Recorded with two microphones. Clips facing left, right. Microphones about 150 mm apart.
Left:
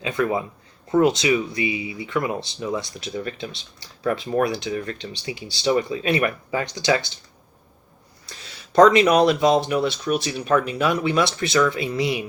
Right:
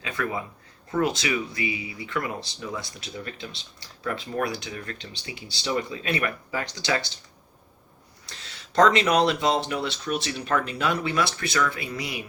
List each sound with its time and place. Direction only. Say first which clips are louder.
0.0 s speech: left 7 dB; 25° left (ahead or behind)
4.4 s speech: left 7 dB; 20° left (ahead or behind)
8.3 s speech: left 4 dB; 15° left (ahead or behind)